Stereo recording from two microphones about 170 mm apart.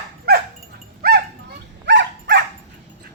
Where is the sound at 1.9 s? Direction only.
90° right.